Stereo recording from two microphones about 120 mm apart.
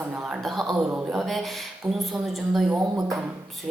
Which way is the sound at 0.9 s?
10° right (ahead or behind).